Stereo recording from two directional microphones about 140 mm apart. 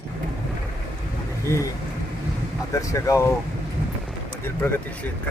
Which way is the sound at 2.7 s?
25° left (ahead or behind).